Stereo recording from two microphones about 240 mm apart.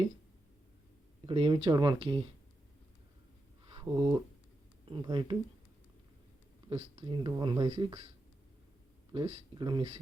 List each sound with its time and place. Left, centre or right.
1.3 s speech: right
3.7 s a sound: centre
4.9 s speech: centre
6.7 s speech: right
9.1 s speech: centre